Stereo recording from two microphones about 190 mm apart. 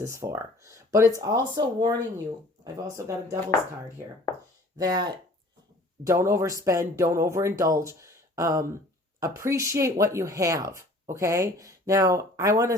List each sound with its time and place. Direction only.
0.0 s speech: 15° right (ahead or behind)
4.8 s speech: 20° right (ahead or behind)